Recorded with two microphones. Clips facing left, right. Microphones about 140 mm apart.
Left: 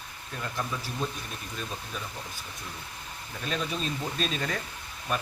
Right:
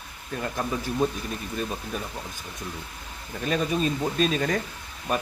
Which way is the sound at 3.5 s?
50° right (ahead or behind).